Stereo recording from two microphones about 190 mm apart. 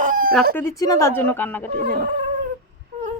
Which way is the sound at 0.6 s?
15° left (ahead or behind).